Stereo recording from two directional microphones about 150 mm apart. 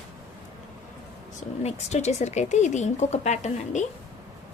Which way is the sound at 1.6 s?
50° left (ahead or behind).